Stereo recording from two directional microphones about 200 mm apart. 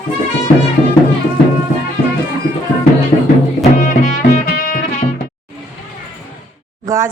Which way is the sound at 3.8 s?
40° left (ahead or behind).